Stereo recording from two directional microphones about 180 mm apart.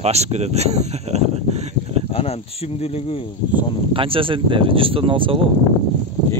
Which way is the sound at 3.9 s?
30° right (ahead or behind).